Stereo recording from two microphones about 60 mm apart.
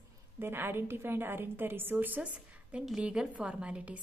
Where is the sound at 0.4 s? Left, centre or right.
Right.